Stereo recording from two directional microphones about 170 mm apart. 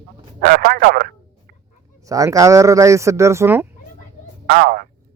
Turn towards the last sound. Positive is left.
turn(degrees=-60)  # may be behind; listen again after turning